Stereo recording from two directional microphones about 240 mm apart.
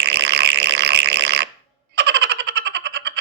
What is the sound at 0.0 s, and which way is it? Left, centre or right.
Fart, right.